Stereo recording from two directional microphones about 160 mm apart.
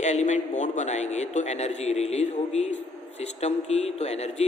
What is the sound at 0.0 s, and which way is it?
A man's voice, 45° left (ahead or behind).